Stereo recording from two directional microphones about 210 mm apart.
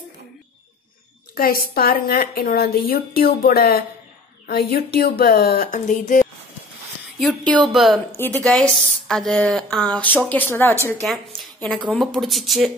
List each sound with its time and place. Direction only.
1.3 s a woman's voice: 45° left (ahead or behind)
7.2 s a woman's voice: centre (ahead or behind)